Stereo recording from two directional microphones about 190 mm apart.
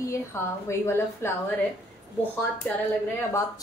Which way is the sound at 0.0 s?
15° left (ahead or behind).